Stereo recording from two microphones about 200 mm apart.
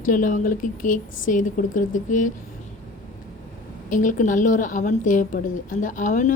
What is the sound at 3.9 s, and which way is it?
A woman's voice, 40° left (ahead or behind).